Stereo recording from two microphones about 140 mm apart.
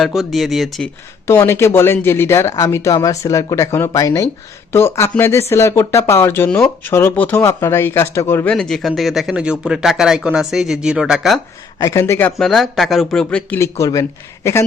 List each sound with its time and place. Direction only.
0.0 s speech: centre (ahead or behind)
1.3 s speech: 20° left (ahead or behind)
8.5 s speech: 5° left (ahead or behind)
11.8 s speech: 20° left (ahead or behind)
12.4 s speech: 5° left (ahead or behind)
13.6 s speech: 25° left (ahead or behind)